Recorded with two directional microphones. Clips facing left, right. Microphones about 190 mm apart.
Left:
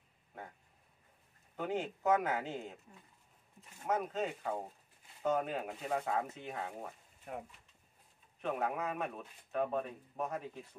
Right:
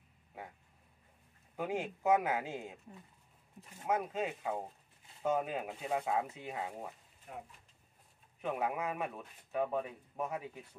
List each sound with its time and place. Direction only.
1.6 s a man's voice: 10° right (ahead or behind)
3.8 s a man's voice: 10° right (ahead or behind)
8.4 s a man's voice: 5° right (ahead or behind)